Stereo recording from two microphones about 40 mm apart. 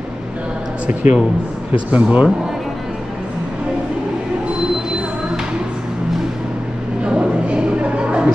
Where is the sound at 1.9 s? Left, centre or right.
Right.